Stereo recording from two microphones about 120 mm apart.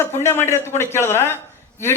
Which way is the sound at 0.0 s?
20° left (ahead or behind).